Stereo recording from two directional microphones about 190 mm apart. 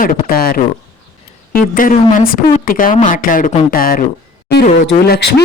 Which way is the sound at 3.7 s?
50° left (ahead or behind).